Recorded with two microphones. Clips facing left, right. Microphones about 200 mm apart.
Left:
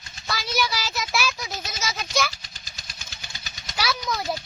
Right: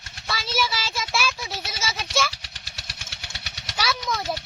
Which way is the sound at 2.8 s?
75° right (ahead or behind).